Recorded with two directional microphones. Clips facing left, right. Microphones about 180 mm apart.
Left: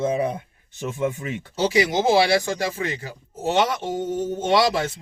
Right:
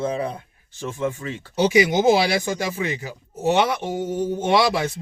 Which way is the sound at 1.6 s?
15° right (ahead or behind).